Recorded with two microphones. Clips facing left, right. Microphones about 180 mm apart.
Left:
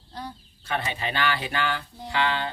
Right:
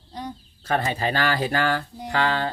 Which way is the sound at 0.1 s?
20° right (ahead or behind).